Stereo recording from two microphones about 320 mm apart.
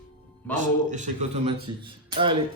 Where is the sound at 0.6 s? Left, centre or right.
Right.